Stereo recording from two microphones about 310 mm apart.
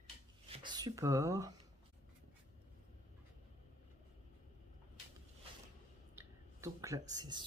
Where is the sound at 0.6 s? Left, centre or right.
Centre.